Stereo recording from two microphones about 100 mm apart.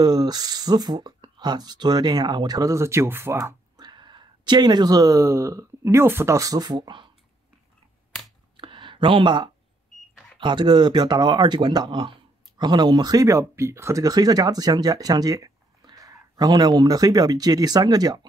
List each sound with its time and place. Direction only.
0.0 s speech: 40° right (ahead or behind); by 3.5 s 25° right (ahead or behind)
3.7 s speech: 50° right (ahead or behind)
8.5 s a sound: 55° right (ahead or behind)
10.4 s speech: 50° right (ahead or behind)